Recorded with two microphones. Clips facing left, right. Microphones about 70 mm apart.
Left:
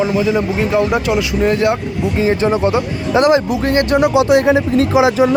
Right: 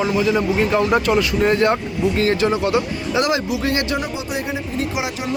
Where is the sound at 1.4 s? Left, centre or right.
Centre.